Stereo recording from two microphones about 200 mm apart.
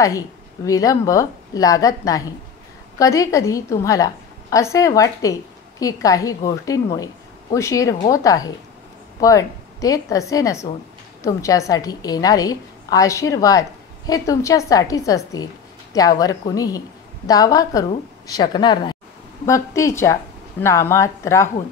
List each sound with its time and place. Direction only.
0.7 s a woman's voice: 15° left (ahead or behind)